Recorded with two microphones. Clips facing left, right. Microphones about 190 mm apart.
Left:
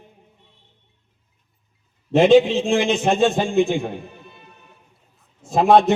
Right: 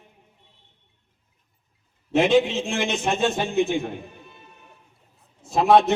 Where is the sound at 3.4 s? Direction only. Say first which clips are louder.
Left 4 dB; 50° left (ahead or behind).